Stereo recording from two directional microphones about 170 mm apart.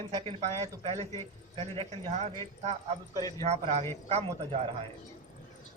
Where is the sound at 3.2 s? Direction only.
20° left (ahead or behind).